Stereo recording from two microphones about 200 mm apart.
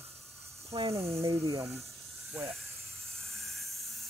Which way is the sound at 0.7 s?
30° right (ahead or behind).